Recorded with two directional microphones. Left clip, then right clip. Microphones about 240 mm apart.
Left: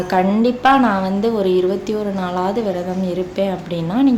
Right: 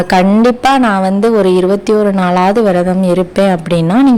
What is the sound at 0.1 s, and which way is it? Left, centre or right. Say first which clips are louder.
A woman's voice: right 6 dB; right.